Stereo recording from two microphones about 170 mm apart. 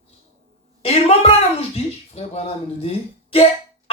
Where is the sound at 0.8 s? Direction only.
35° left (ahead or behind).